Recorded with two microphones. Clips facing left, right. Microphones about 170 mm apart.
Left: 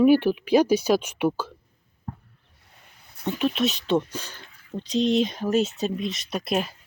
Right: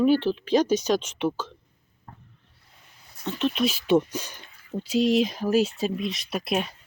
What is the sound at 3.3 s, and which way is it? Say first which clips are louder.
Speech: left 1 dB; 5° left (ahead or behind).